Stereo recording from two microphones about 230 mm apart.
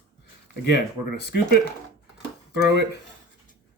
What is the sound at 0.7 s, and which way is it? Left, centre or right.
Speech, left.